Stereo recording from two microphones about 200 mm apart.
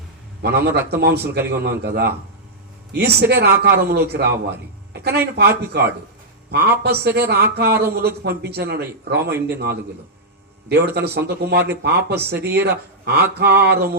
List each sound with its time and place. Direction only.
0.4 s a man's voice: 55° right (ahead or behind)
10.9 s a man's voice: 55° right (ahead or behind)